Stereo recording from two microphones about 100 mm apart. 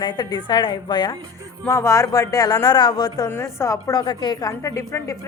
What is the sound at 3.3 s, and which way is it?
Speech, 30° left (ahead or behind).